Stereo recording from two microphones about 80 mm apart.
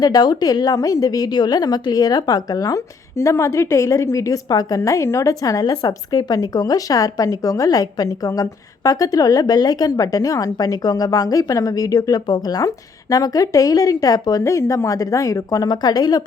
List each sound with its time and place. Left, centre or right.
0.0 s a woman's voice: left
4.8 s a woman's voice: left